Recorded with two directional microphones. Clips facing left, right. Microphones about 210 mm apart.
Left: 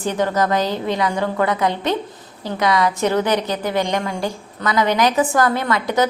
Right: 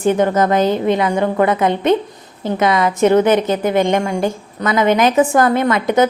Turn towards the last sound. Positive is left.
turn(degrees=-20)  # may be behind; listen again after turning